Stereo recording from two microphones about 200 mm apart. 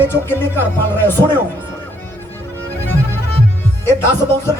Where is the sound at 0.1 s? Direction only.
10° left (ahead or behind).